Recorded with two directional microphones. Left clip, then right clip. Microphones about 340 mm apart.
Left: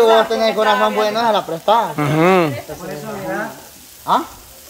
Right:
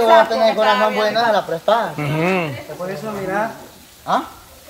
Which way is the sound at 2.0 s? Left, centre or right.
Centre.